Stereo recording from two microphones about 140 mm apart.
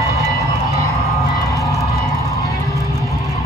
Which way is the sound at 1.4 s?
25° left (ahead or behind).